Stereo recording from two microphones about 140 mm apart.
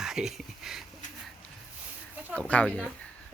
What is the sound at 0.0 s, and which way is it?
Speech, 5° right (ahead or behind).